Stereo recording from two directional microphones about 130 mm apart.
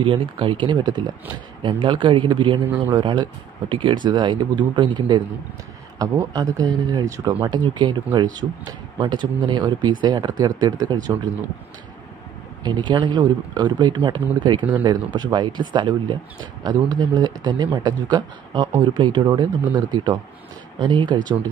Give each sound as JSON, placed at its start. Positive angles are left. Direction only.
{"t": 0.0, "sound": "a man's voice", "side_deg": -40}
{"t": 12.6, "sound": "speech", "side_deg": -35}